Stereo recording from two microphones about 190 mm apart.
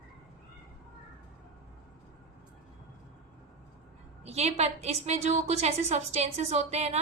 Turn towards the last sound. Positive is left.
turn(degrees=-35)  # may be behind; listen again after turning